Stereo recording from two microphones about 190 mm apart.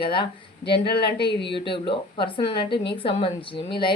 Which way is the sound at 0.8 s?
60° left (ahead or behind).